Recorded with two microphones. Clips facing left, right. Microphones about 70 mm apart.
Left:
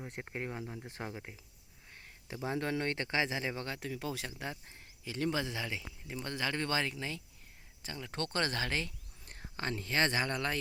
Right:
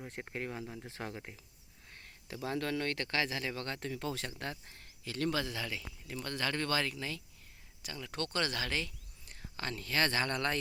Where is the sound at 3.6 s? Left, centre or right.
Centre.